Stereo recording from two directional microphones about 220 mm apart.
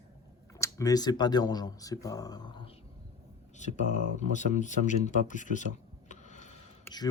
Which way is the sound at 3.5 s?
35° left (ahead or behind).